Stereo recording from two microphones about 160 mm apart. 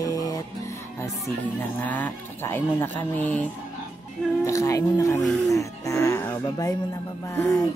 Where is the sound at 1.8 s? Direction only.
10° left (ahead or behind).